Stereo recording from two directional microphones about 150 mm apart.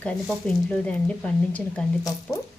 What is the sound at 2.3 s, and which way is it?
Speech, 20° left (ahead or behind).